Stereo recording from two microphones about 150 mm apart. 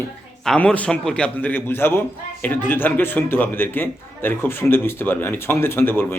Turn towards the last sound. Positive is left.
turn(degrees=15)  # may be behind; listen again after turning